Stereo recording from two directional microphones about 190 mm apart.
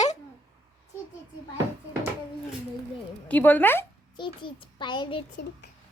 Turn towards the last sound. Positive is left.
turn(degrees=25)  # may be behind; listen again after turning